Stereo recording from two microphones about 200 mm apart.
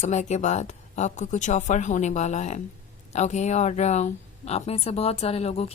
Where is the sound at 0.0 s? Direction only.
35° left (ahead or behind).